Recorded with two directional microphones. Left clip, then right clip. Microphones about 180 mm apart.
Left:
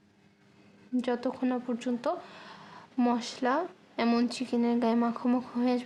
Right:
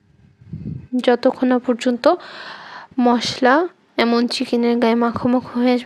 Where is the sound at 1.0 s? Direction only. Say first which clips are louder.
Right 15 dB; 45° right (ahead or behind).